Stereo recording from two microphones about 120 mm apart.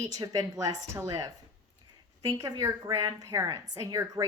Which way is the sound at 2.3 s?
30° right (ahead or behind).